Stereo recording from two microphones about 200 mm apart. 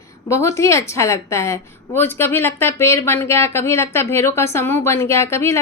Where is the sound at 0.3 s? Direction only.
15° left (ahead or behind).